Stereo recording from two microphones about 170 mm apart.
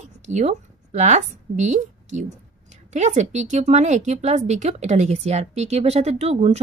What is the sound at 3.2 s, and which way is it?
Speech, 45° right (ahead or behind).